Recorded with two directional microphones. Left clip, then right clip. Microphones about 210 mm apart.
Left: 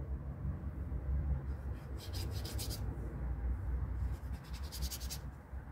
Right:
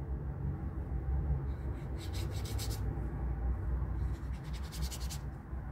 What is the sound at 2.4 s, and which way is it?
Rub, 15° left (ahead or behind).